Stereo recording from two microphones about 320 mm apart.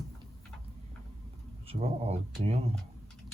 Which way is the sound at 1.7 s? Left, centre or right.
Centre.